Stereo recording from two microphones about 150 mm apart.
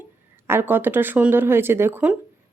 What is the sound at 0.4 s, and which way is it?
A woman's voice, 15° right (ahead or behind).